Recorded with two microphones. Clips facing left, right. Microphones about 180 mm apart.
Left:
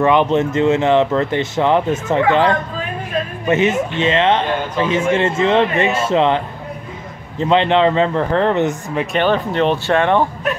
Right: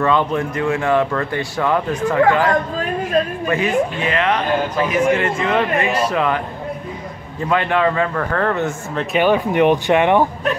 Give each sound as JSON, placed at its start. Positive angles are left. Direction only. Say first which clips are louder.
{"t": 0.0, "sound": "speech", "louder": "left 4 dB", "side_deg": 20}
{"t": 9.1, "sound": "speech", "louder": "right 2 dB", "side_deg": -10}